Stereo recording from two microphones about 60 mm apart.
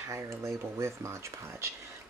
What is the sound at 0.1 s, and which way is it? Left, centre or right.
Speech, right.